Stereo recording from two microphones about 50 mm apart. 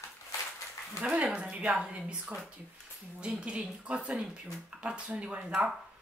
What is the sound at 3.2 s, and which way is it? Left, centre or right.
A woman's voice, right.